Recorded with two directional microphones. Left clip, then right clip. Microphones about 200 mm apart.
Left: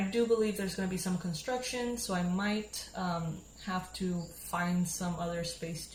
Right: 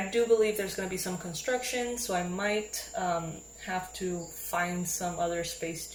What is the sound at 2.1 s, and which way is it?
Speech, 20° right (ahead or behind).